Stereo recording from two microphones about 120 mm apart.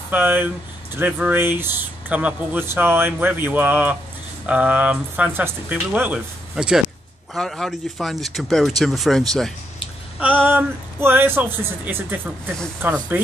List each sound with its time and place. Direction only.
0.1 s speech: 15° right (ahead or behind); by 9.5 s 5° left (ahead or behind)
10.1 s speech: 15° right (ahead or behind)